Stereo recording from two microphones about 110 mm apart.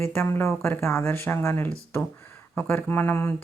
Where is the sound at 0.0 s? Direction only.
20° left (ahead or behind).